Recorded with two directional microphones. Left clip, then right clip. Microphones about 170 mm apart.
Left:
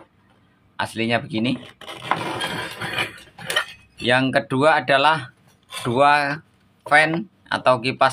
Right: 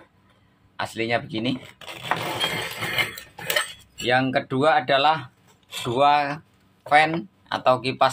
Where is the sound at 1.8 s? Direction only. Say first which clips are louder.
Left 1 dB; 5° right (ahead or behind).